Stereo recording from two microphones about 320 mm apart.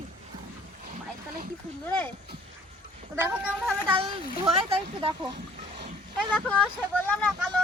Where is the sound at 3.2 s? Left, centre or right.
Centre.